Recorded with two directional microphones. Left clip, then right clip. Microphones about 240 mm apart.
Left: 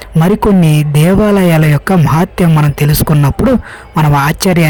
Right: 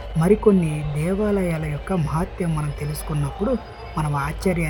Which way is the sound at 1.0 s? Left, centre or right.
Left.